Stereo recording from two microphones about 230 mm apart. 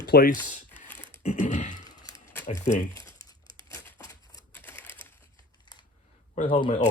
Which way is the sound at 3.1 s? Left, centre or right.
Right.